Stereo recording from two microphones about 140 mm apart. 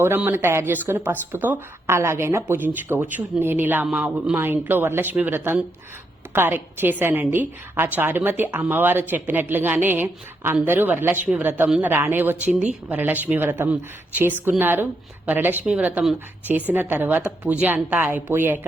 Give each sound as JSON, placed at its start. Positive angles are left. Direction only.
{"t": 0.0, "sound": "a woman's voice", "side_deg": -15}